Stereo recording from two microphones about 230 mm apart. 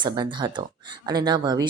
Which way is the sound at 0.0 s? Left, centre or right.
Centre.